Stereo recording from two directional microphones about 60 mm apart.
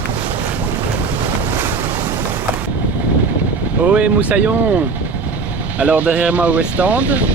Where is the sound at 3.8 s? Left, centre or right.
Right.